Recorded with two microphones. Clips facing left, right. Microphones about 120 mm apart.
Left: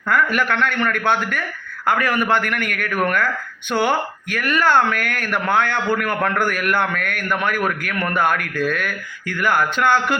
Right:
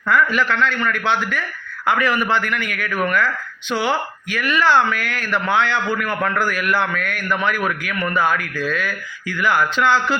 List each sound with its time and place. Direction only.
0.1 s speech: 55° left (ahead or behind)